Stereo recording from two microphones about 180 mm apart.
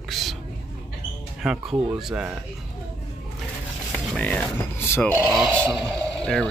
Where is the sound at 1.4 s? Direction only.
5° right (ahead or behind).